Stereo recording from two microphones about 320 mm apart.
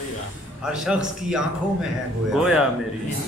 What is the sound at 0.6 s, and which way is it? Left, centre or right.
A man's voice, centre.